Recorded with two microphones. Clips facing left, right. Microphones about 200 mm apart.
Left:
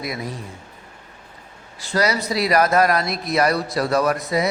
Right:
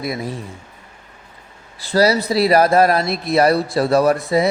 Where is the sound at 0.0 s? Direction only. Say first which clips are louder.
Right 4 dB; 25° right (ahead or behind).